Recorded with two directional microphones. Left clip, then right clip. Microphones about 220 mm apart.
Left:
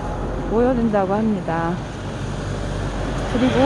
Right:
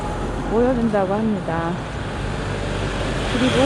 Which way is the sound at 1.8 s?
35° right (ahead or behind).